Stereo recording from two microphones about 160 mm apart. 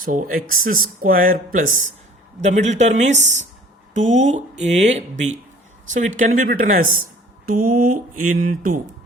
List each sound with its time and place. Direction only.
0.0 s speech: 60° right (ahead or behind)
2.4 s speech: 45° right (ahead or behind)